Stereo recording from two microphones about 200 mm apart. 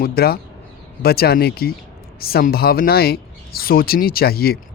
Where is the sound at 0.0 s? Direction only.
50° left (ahead or behind).